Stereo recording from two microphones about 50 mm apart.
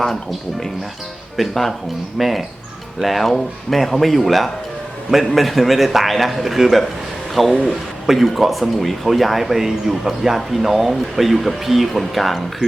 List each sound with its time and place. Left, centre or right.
0.0 s speech: centre